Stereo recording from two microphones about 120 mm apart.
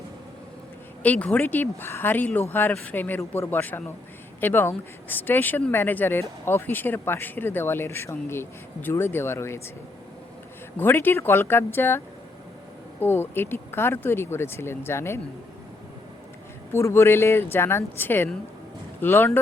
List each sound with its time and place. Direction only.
1.0 s speech: 10° left (ahead or behind)
10.8 s speech: 15° left (ahead or behind)
16.7 s speech: 20° left (ahead or behind)